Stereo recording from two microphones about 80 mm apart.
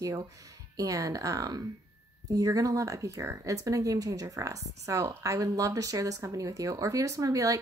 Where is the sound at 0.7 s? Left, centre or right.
Right.